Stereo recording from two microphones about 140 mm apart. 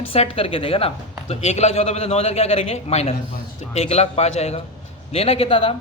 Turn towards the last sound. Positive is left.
turn(degrees=40)  # may be behind; listen again after turning